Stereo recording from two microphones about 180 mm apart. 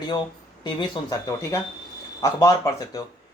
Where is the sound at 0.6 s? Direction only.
25° left (ahead or behind).